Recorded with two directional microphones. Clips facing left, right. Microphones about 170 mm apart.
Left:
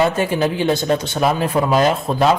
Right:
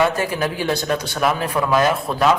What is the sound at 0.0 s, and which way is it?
A man's voice, 25° left (ahead or behind).